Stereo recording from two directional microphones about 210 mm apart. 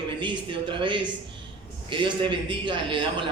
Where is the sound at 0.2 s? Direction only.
25° right (ahead or behind).